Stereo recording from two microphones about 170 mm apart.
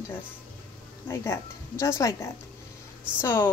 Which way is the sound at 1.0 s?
15° left (ahead or behind).